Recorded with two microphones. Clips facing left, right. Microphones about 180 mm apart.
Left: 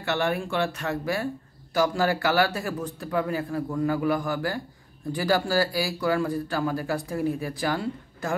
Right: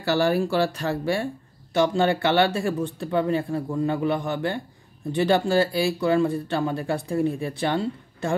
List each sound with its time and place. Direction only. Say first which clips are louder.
0.0 s speech: right 5 dB; 35° right (ahead or behind)